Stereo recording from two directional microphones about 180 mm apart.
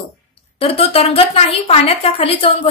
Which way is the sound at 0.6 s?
30° left (ahead or behind).